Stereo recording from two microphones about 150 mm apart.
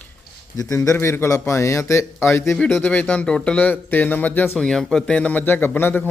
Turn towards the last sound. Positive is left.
turn(degrees=15)  # may be behind; listen again after turning